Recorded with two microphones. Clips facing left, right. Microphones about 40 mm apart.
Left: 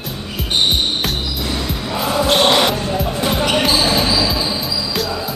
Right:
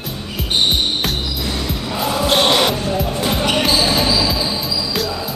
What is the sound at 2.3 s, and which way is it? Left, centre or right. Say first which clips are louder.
Basketball bounce: left 1 dB; centre.